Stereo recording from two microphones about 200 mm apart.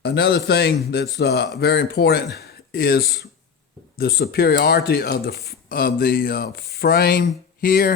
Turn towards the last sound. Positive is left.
turn(degrees=45)  # may be behind; listen again after turning